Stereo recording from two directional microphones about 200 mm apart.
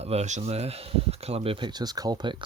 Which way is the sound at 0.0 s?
30° right (ahead or behind).